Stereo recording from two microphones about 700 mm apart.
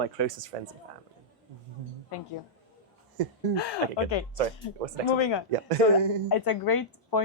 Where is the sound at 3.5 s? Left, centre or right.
Left.